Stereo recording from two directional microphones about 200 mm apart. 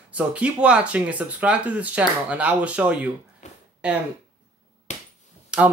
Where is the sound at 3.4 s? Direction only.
35° left (ahead or behind).